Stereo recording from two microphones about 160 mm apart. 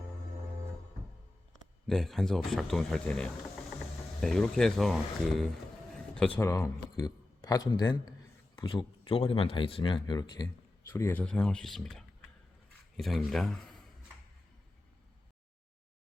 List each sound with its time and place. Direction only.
1.9 s a man's voice: centre (ahead or behind)